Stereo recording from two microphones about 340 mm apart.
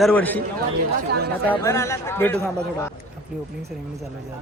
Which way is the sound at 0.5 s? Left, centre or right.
Right.